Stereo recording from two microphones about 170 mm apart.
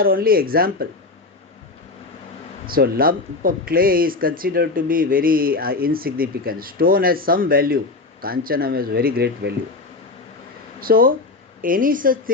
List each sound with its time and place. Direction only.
0.0 s speech: 60° right (ahead or behind)
2.6 s speech: 60° right (ahead or behind)
10.8 s speech: 60° right (ahead or behind)